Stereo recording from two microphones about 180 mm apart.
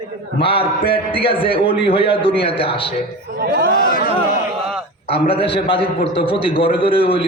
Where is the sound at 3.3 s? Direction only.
60° right (ahead or behind).